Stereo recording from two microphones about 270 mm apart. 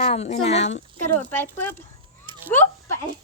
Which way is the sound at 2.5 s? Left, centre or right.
Centre.